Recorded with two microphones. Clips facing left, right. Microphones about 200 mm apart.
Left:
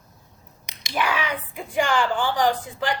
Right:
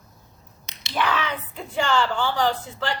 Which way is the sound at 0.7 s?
10° left (ahead or behind).